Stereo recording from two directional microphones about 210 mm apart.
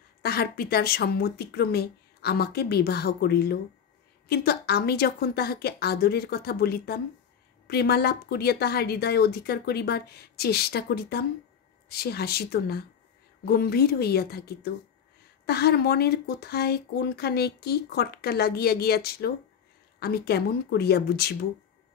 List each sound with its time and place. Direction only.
0.2 s speech: 50° left (ahead or behind)